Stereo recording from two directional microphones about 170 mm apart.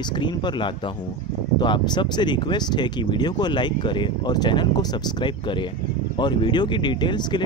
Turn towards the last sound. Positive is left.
turn(degrees=25)  # may be behind; listen again after turning